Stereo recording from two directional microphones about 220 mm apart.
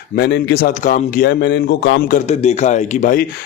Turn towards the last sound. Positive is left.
turn(degrees=35)  # may be behind; listen again after turning